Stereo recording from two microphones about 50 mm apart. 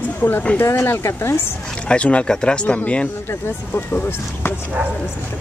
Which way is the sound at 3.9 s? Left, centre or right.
Left.